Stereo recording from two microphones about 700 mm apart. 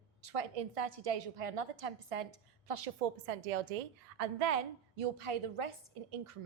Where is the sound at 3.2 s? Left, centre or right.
Right.